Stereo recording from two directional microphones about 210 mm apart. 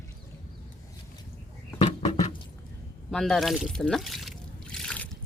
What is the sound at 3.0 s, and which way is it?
Pour, centre (ahead or behind).